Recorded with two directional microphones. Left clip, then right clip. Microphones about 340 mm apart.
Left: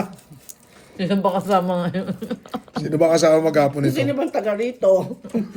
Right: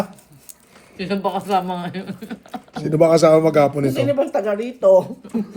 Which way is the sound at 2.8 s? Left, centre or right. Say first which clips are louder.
Right 3 dB; right.